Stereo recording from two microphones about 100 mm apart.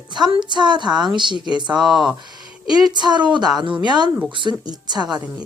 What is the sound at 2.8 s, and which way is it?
A woman's voice, 45° right (ahead or behind).